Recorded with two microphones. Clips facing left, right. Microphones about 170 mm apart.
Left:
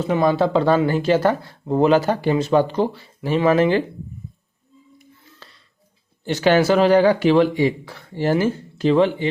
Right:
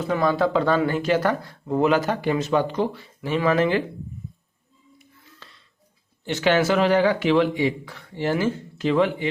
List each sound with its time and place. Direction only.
0.0 s speech: 25° left (ahead or behind)
5.4 s music: 35° left (ahead or behind)
6.2 s speech: 35° left (ahead or behind)